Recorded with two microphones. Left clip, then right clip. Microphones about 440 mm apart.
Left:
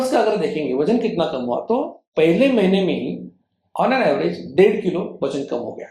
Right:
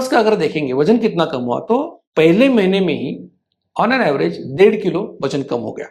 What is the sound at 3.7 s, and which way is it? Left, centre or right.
Speech, right.